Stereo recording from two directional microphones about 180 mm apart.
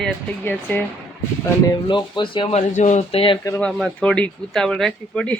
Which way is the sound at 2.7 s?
40° left (ahead or behind).